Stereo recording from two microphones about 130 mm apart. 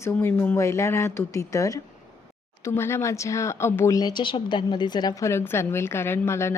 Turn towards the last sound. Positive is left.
turn(degrees=20)  # may be behind; listen again after turning